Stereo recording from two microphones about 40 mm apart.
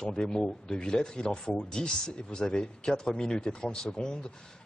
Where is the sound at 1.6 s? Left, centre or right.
Left.